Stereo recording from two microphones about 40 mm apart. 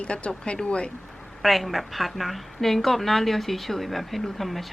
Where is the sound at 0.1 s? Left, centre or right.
Left.